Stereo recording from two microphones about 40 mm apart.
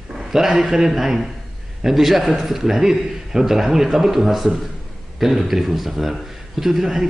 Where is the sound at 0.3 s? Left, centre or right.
Centre.